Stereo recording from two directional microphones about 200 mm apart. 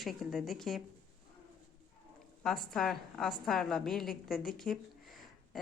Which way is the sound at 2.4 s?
Centre (ahead or behind).